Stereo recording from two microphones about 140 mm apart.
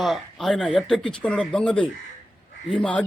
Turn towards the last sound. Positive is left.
turn(degrees=5)  # may be behind; listen again after turning